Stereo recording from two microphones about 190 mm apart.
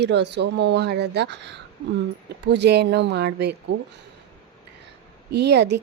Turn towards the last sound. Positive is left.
turn(degrees=-65)  # may be behind; listen again after turning